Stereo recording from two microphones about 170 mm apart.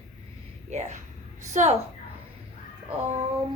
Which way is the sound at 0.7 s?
45° right (ahead or behind).